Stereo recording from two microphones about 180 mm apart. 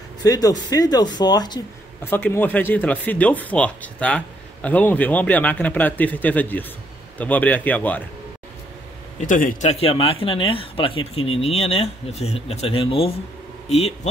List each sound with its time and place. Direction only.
0.2 s speech: 20° left (ahead or behind)
2.0 s speech: 10° left (ahead or behind)
9.2 s speech: 50° left (ahead or behind)